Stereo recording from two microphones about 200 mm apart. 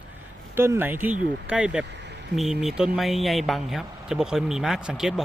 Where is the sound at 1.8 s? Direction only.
60° right (ahead or behind).